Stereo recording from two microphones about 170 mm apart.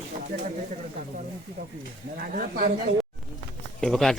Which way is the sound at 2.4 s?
60° right (ahead or behind).